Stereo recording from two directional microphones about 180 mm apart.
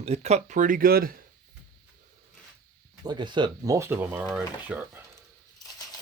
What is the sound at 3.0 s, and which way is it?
Speech, 25° right (ahead or behind).